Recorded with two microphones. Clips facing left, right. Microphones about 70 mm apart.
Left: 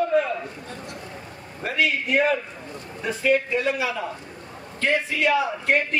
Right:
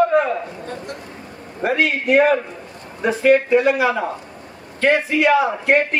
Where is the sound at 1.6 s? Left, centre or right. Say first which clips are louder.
Right 5 dB; right.